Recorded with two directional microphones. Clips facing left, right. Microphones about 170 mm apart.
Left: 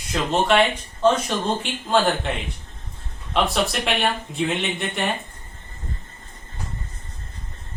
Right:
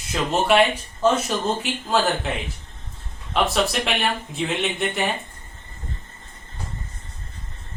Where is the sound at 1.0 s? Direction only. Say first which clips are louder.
Left 1 dB; 5° right (ahead or behind).